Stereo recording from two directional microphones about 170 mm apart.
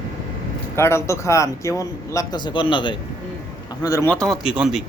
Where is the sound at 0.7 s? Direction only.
15° left (ahead or behind).